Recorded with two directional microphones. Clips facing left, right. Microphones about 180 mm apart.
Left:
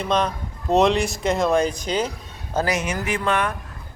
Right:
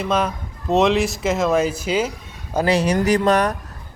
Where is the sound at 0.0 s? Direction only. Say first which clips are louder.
Right 1 dB; 5° right (ahead or behind).